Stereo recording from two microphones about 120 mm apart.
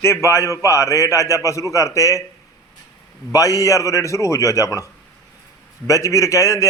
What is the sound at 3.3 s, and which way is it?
A man's voice, 30° left (ahead or behind).